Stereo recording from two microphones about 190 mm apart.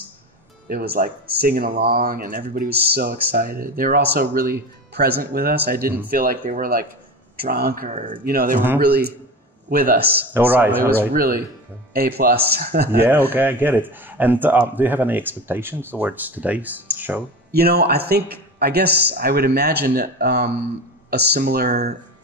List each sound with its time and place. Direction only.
0.7 s a man's voice: 55° right (ahead or behind)
10.3 s speech: 10° right (ahead or behind)
11.1 s a man's voice: 50° right (ahead or behind)
13.3 s speech: 10° right (ahead or behind)
16.9 s a sound: 10° right (ahead or behind)
17.5 s a man's voice: 55° right (ahead or behind)